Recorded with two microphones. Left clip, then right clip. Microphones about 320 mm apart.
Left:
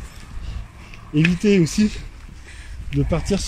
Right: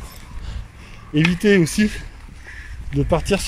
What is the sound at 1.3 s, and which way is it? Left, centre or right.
Speech, right.